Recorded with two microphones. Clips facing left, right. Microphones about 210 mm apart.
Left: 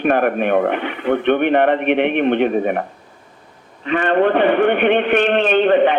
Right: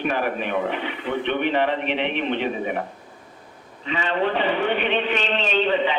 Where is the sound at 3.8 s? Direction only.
55° left (ahead or behind).